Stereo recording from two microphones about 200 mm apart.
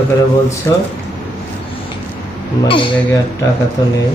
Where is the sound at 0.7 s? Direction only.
15° left (ahead or behind).